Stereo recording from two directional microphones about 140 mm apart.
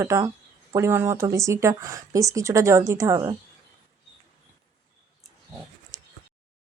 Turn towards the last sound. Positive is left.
turn(degrees=-25)  # may be behind; listen again after turning